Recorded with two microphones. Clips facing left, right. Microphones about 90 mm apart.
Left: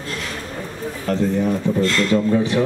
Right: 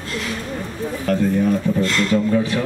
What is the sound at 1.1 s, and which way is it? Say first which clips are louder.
A man's voice: right 1 dB; 25° left (ahead or behind).